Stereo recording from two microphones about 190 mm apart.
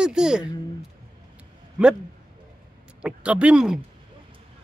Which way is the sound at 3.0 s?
5° right (ahead or behind).